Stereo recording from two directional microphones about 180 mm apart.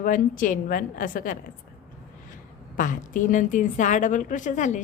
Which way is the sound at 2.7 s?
45° left (ahead or behind).